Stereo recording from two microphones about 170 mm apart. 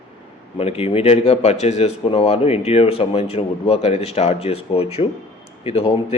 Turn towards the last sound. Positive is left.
turn(degrees=35)  # may be behind; listen again after turning